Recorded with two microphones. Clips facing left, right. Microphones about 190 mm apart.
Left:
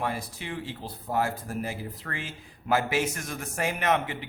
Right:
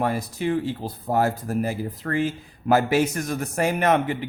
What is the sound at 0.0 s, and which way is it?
Speech, 45° right (ahead or behind).